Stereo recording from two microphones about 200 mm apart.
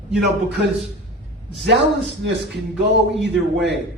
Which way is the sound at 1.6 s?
60° right (ahead or behind).